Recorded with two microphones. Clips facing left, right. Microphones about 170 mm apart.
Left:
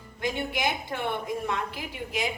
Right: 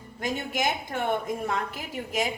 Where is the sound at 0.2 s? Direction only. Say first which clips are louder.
Even; 45° right (ahead or behind).